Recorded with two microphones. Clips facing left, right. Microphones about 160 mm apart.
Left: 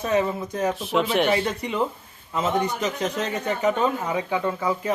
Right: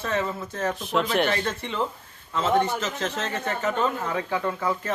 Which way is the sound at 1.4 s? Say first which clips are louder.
Left 3 dB; 15° left (ahead or behind).